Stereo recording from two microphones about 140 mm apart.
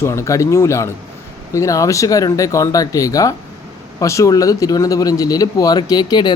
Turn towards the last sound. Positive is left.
turn(degrees=30)  # may be behind; listen again after turning